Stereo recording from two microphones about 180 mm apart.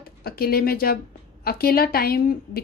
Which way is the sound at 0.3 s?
60° left (ahead or behind).